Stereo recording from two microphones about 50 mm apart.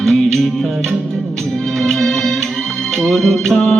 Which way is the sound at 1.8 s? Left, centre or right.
Centre.